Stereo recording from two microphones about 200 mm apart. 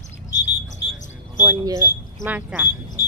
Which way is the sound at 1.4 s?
15° right (ahead or behind).